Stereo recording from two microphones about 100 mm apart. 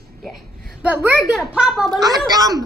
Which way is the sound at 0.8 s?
15° right (ahead or behind).